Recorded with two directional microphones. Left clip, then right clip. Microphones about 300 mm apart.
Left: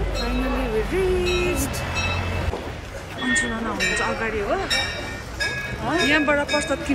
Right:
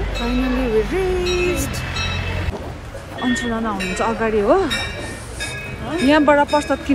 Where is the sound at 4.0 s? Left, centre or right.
Centre.